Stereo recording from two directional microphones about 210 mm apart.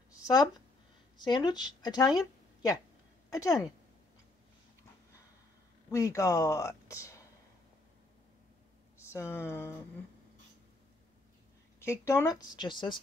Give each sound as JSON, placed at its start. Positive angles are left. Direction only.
{"t": 0.1, "sound": "a sound", "side_deg": 20}
{"t": 1.1, "sound": "a woman's voice", "side_deg": 20}
{"t": 5.9, "sound": "speech", "side_deg": 15}
{"t": 9.1, "sound": "speech", "side_deg": 10}
{"t": 11.8, "sound": "a woman's voice", "side_deg": 10}